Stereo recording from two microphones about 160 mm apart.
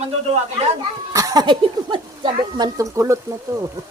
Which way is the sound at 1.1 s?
20° right (ahead or behind).